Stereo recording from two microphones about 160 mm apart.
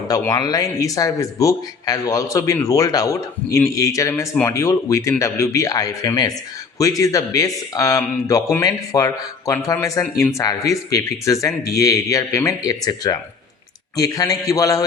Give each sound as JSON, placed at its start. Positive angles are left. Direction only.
{"t": 0.1, "sound": "speech", "side_deg": 25}